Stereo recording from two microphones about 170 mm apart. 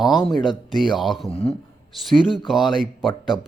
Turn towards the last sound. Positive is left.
turn(degrees=-5)  # may be behind; listen again after turning